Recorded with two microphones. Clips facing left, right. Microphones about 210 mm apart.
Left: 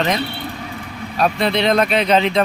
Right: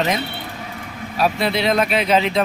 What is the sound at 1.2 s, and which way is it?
Speech, 5° right (ahead or behind).